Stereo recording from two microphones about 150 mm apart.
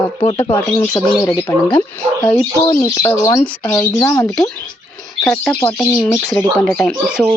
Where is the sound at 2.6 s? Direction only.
25° left (ahead or behind); by 6.9 s 5° left (ahead or behind).